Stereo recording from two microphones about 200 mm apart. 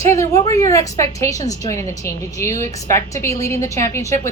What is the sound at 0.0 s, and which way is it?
Speech, 15° left (ahead or behind).